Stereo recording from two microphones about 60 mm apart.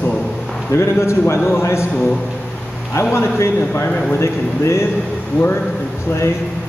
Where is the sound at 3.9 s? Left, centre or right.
Centre.